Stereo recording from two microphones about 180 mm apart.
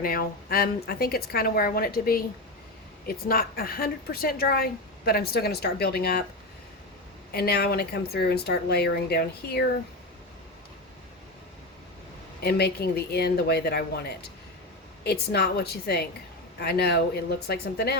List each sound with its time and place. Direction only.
0.0 s speech: 55° left (ahead or behind)
7.3 s speech: 60° left (ahead or behind)
12.4 s speech: 60° left (ahead or behind)